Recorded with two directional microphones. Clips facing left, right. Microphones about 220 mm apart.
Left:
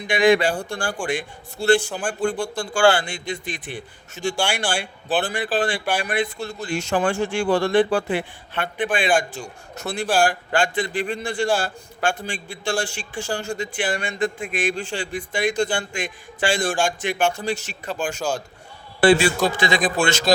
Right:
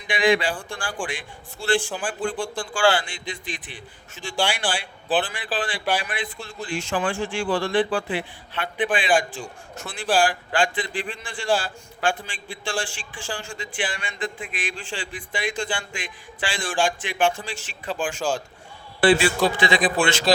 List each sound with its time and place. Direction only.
0.1 s a man's voice: 45° left (ahead or behind)
18.9 s a man's voice: 45° left (ahead or behind)